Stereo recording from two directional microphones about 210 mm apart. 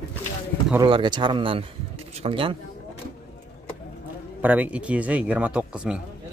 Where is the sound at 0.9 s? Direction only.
20° right (ahead or behind).